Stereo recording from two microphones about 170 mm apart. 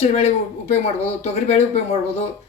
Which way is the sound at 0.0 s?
40° left (ahead or behind).